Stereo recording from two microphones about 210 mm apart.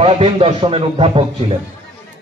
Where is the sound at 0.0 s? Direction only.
25° right (ahead or behind).